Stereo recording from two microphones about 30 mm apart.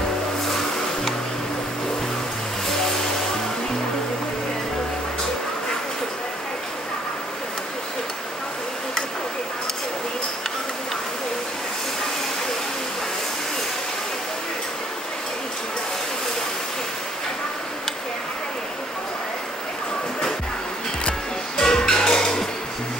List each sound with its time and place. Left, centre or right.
0.5 s music: centre
21.5 s music: centre